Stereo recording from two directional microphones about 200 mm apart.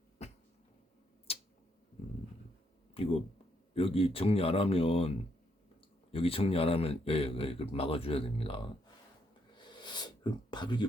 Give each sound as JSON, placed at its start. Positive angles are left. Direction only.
{"t": 1.3, "sound": "tick-tock", "side_deg": 30}
{"t": 2.9, "sound": "speech", "side_deg": 30}
{"t": 9.6, "sound": "a sound", "side_deg": 20}